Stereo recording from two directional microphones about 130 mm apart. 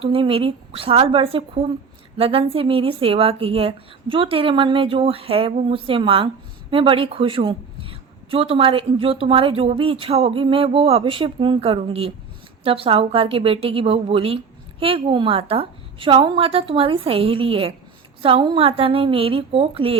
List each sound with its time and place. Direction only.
0.0 s a woman's voice: 45° right (ahead or behind)